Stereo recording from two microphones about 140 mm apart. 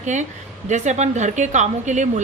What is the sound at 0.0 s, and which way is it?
A woman's voice, 60° right (ahead or behind).